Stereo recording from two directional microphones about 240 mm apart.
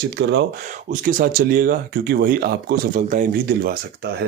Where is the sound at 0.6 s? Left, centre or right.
Right.